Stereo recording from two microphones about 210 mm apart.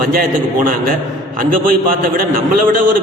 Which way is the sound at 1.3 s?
40° right (ahead or behind).